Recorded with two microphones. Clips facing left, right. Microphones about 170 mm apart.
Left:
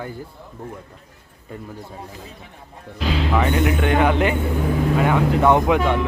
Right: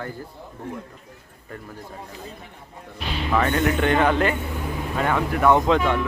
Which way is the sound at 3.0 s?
90° left.